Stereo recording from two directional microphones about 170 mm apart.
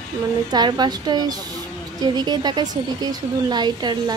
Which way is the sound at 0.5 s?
25° right (ahead or behind).